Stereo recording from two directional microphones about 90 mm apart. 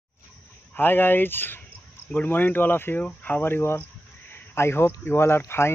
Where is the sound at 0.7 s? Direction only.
25° left (ahead or behind).